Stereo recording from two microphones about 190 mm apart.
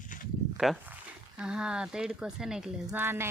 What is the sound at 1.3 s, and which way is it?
Speech, 5° right (ahead or behind).